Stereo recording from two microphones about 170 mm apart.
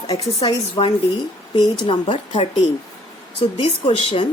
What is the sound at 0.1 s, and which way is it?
A woman's voice, 35° left (ahead or behind).